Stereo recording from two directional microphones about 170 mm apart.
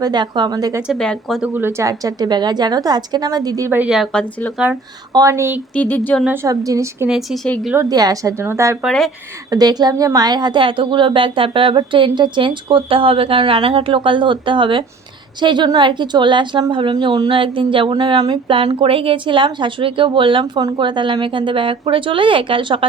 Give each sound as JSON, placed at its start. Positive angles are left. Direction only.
{"t": 0.0, "sound": "a woman's voice", "side_deg": -25}
{"t": 0.9, "sound": "speech", "side_deg": 0}
{"t": 1.5, "sound": "a woman's voice", "side_deg": -15}
{"t": 5.1, "sound": "a woman's voice", "side_deg": -20}
{"t": 5.7, "sound": "speech", "side_deg": 10}
{"t": 6.2, "sound": "a woman's voice", "side_deg": -15}
{"t": 7.1, "sound": "speech", "side_deg": 0}
{"t": 7.7, "sound": "a woman's voice", "side_deg": -20}
{"t": 8.8, "sound": "speech", "side_deg": 0}
{"t": 9.5, "sound": "a woman's voice", "side_deg": -20}